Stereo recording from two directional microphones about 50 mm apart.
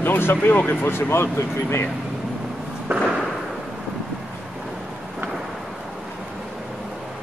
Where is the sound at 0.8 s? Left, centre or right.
Left.